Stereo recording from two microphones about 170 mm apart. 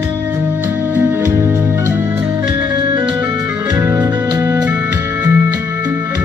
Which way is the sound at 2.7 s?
25° right (ahead or behind).